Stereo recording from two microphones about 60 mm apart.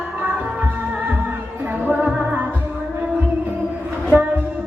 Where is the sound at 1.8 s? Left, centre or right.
Right.